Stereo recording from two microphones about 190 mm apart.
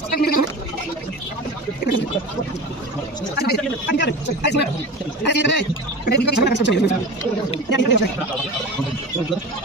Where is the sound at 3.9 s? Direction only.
65° left (ahead or behind).